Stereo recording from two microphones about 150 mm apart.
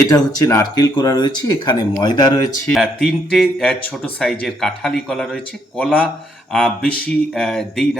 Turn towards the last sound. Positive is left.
turn(degrees=5)  # may be behind; listen again after turning